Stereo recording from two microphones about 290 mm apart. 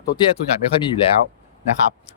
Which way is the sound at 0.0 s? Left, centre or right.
Centre.